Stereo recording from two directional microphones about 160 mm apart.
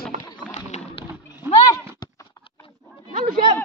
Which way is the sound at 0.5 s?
45° left (ahead or behind).